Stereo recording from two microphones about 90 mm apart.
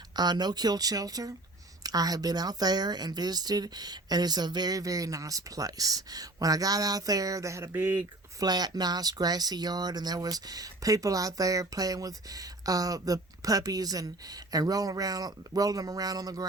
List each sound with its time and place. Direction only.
0.2 s speech: 50° right (ahead or behind); by 8.0 s 25° right (ahead or behind)
8.4 s speech: 50° right (ahead or behind)